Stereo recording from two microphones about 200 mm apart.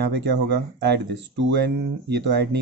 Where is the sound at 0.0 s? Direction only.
55° right (ahead or behind).